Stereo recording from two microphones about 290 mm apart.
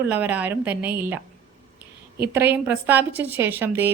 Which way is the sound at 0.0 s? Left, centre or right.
Centre.